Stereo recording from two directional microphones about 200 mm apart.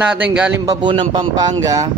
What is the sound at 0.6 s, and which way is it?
Speech, 20° right (ahead or behind).